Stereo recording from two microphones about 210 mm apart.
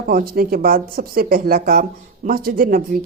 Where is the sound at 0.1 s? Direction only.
45° right (ahead or behind).